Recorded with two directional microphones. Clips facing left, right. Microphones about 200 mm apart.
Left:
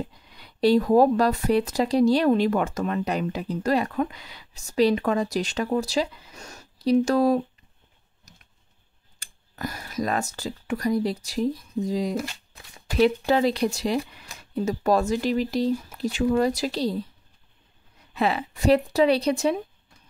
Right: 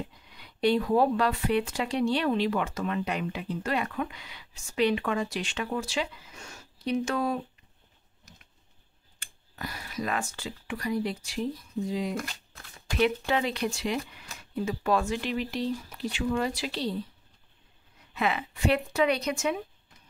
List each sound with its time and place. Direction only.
0.0 s speech: 35° left (ahead or behind)
8.3 s a sound: 40° left (ahead or behind)
9.2 s speech: 45° left (ahead or behind)
18.1 s speech: 35° left (ahead or behind)